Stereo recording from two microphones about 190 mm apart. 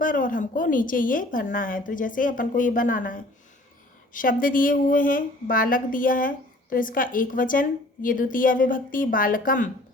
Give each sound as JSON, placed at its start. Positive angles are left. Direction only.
{"t": 0.0, "sound": "a woman's voice", "side_deg": 45}